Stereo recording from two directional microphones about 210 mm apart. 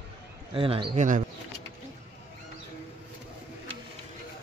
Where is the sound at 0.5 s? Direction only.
25° right (ahead or behind).